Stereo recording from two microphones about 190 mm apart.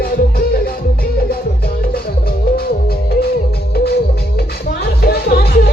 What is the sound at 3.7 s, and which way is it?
Music, 55° left (ahead or behind).